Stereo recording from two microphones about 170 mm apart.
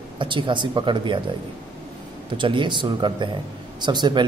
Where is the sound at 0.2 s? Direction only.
30° right (ahead or behind).